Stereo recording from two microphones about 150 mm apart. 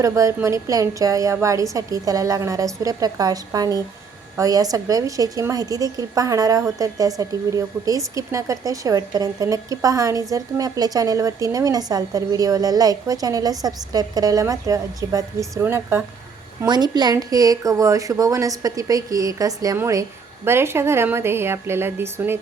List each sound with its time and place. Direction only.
0.0 s a woman's voice: 20° right (ahead or behind)
16.6 s a woman's voice: 30° right (ahead or behind)